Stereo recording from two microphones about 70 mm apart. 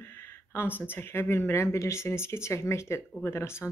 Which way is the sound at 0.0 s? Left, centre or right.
Left.